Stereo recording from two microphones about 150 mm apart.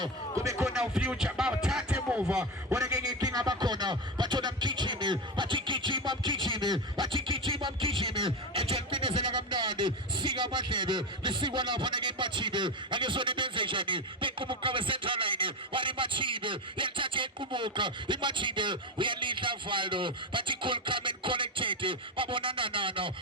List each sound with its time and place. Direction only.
0.6 s music: 5° right (ahead or behind)
2.7 s a man's voice: 25° right (ahead or behind)
7.3 s music: 35° right (ahead or behind)